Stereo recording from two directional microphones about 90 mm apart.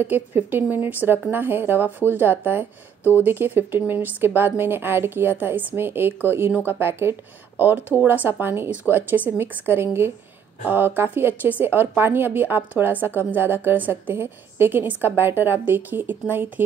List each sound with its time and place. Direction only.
0.0 s a woman's voice: 20° right (ahead or behind)
3.0 s speech: 25° left (ahead or behind)
3.3 s a woman's voice: 25° right (ahead or behind)